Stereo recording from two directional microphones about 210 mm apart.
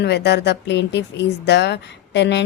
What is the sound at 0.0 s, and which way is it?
Speech, 50° left (ahead or behind).